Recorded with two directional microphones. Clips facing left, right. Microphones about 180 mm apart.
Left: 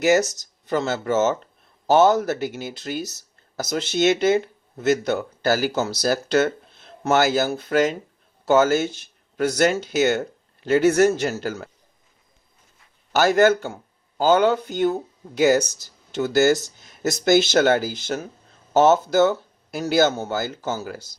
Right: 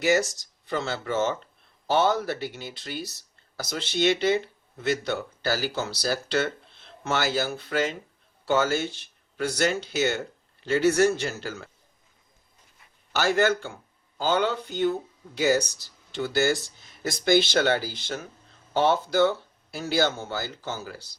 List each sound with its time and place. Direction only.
0.0 s speech: 45° left (ahead or behind)
13.1 s speech: 45° left (ahead or behind)